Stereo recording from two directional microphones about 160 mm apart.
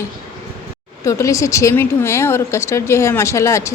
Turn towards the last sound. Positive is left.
turn(degrees=20)  # may be behind; listen again after turning